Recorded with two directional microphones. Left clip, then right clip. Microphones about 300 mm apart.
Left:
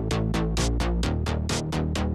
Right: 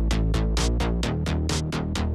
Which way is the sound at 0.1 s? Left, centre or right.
Centre.